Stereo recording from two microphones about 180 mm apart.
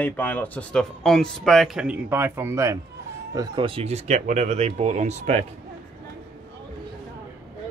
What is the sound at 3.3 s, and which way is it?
Speech, 30° right (ahead or behind).